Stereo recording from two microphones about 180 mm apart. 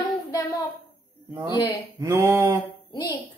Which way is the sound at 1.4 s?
25° left (ahead or behind).